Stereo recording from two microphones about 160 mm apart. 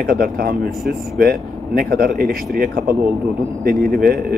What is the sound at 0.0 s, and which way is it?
Speech, 65° right (ahead or behind).